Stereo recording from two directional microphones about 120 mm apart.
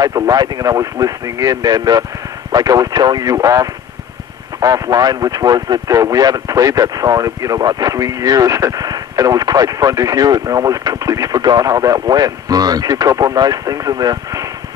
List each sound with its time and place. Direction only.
0.0 s speech: 30° right (ahead or behind)